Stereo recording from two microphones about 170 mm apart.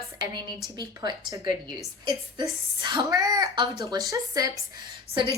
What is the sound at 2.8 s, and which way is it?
A woman's voice, 25° right (ahead or behind).